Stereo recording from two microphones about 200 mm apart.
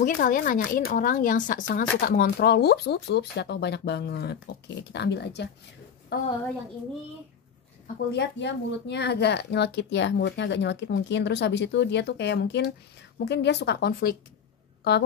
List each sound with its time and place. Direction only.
0.0 s speech: 45° left (ahead or behind)
8.1 s a woman's voice: 60° left (ahead or behind)